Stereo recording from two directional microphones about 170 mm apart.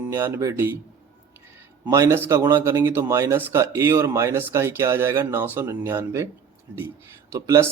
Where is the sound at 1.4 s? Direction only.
15° right (ahead or behind).